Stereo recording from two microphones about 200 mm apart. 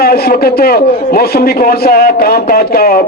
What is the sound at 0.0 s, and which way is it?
A man's voice, 50° left (ahead or behind).